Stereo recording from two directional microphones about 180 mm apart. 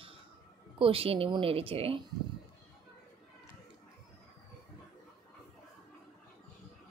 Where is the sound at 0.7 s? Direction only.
30° right (ahead or behind).